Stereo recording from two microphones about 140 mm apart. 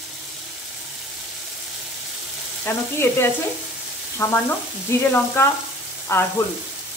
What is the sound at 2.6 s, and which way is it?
Sizzle, 15° left (ahead or behind).